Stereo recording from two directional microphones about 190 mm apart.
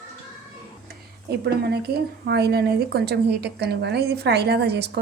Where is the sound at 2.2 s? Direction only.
60° right (ahead or behind).